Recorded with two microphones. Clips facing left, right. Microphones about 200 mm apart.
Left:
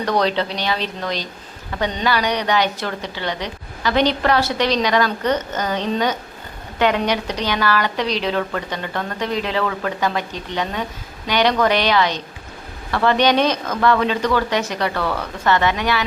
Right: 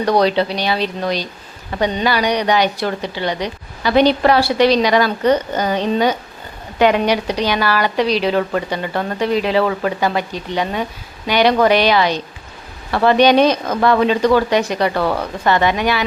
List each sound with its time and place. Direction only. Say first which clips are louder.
0.2 s a woman's voice: right 4 dB; 10° right (ahead or behind)
14.9 s speech: right 5 dB; 35° right (ahead or behind)
15.4 s a woman's voice: right 2 dB; 15° right (ahead or behind)